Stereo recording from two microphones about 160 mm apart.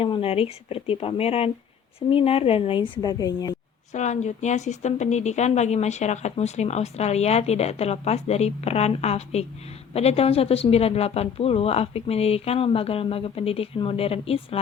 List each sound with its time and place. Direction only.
0.0 s a woman's voice: 35° left (ahead or behind)
3.9 s a woman's voice: 45° left (ahead or behind)